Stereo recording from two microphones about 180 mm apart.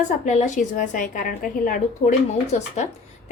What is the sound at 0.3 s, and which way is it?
Speech, 40° left (ahead or behind).